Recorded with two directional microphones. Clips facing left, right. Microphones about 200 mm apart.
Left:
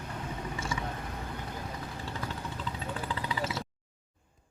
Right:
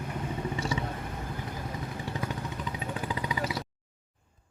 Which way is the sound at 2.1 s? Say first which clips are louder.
Right 4 dB; 20° right (ahead or behind).